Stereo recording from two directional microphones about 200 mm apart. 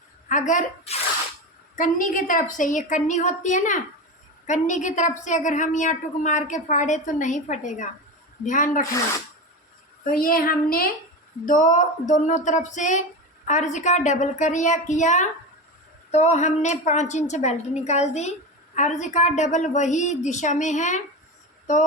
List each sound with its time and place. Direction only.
0.3 s a woman's voice: 40° left (ahead or behind)
10.0 s a woman's voice: 45° left (ahead or behind)